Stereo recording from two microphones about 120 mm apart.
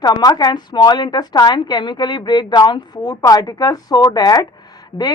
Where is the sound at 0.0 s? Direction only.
35° left (ahead or behind).